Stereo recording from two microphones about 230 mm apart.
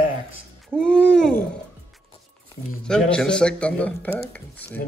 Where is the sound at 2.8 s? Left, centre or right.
Centre.